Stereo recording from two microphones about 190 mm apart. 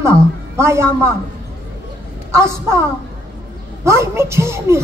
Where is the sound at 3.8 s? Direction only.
15° right (ahead or behind).